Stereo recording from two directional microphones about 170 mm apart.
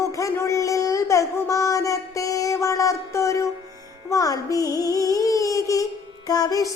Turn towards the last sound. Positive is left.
turn(degrees=20)  # may be behind; listen again after turning